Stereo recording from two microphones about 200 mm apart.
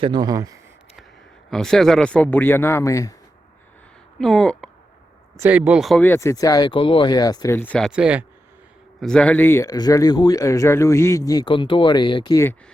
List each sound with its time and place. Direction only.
0.0 s speech: 20° right (ahead or behind)
1.5 s speech: centre (ahead or behind)
4.2 s speech: centre (ahead or behind)
5.4 s speech: 10° right (ahead or behind)
6.0 s speech: 10° left (ahead or behind)
7.9 s speech: 5° right (ahead or behind); by 12.5 s 15° left (ahead or behind)